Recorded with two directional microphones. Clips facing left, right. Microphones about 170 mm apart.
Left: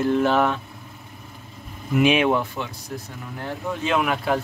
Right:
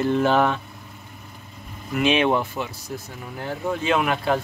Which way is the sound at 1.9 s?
10° left (ahead or behind).